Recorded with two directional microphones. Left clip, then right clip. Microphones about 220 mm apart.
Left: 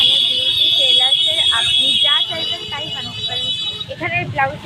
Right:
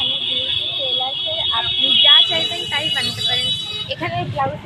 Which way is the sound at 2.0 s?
5° right (ahead or behind).